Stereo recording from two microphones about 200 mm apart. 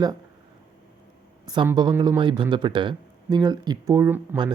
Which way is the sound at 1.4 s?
20° right (ahead or behind).